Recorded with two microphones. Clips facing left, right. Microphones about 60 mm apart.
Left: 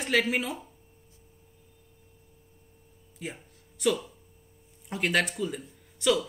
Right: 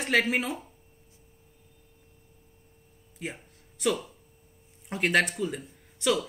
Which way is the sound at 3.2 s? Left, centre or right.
Centre.